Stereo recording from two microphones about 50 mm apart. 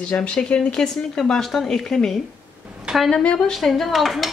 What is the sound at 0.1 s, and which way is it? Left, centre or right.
Speech, left.